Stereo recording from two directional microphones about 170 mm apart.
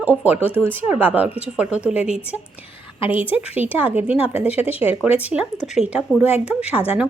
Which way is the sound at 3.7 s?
10° right (ahead or behind).